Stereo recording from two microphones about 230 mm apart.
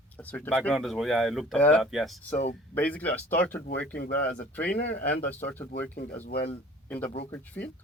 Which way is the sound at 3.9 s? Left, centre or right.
Left.